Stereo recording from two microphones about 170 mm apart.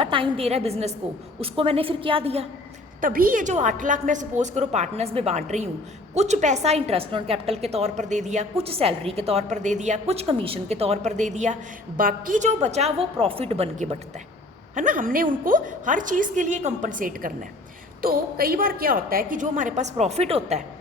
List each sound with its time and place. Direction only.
0.0 s a woman's voice: 30° right (ahead or behind)
3.0 s a woman's voice: 55° right (ahead or behind)
11.9 s a woman's voice: 55° right (ahead or behind); by 14.0 s 40° right (ahead or behind)
14.8 s a woman's voice: 50° right (ahead or behind)